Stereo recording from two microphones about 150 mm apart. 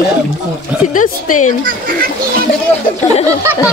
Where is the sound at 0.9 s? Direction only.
60° left (ahead or behind).